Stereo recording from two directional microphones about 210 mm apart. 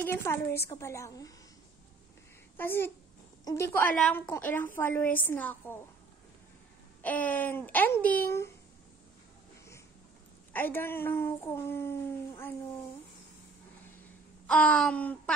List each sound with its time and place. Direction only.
0.0 s speech: 10° left (ahead or behind)
2.5 s a child's voice: 10° left (ahead or behind)
7.0 s speech: 5° left (ahead or behind)
10.5 s speech: 10° left (ahead or behind)
14.5 s speech: 5° left (ahead or behind)